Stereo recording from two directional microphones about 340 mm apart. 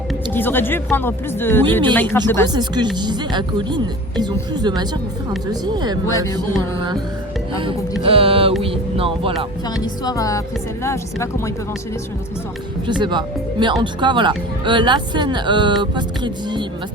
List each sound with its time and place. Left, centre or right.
0.3 s speech: centre
2.5 s speech: centre
6.3 s speech: centre
8.0 s speech: centre
9.8 s speech: centre
13.0 s speech: centre